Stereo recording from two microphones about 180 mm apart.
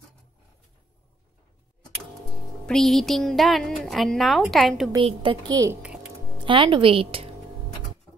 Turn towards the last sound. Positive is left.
turn(degrees=-30)  # may be behind; listen again after turning